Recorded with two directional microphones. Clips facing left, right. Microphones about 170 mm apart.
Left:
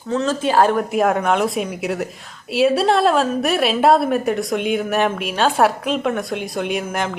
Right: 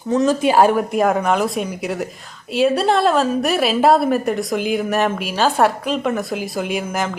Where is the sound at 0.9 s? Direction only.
Centre (ahead or behind).